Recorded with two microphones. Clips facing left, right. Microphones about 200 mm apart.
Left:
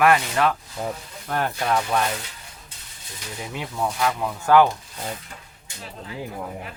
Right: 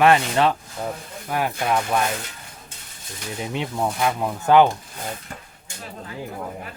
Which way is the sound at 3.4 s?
25° right (ahead or behind).